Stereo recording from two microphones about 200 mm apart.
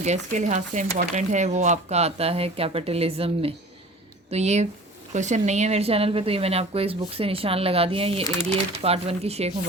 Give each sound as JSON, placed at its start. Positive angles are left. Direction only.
{"t": 0.0, "sound": "a woman's voice", "side_deg": -35}